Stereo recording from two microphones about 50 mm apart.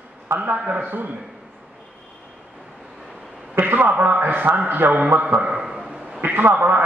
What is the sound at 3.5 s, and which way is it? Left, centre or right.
A man's voice, right.